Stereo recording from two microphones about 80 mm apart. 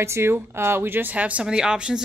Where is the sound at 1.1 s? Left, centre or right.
Centre.